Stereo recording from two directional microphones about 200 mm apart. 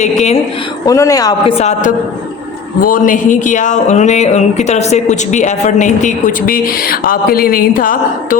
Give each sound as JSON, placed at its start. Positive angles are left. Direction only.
{"t": 0.0, "sound": "speech", "side_deg": 35}
{"t": 0.9, "sound": "speech", "side_deg": 15}
{"t": 2.8, "sound": "speech", "side_deg": 40}